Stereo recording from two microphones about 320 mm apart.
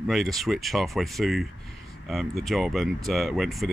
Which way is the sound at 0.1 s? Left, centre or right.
Centre.